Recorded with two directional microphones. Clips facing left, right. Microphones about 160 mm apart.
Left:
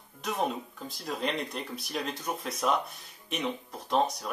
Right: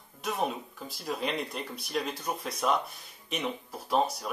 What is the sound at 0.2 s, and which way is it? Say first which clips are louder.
Speech: even; centre (ahead or behind).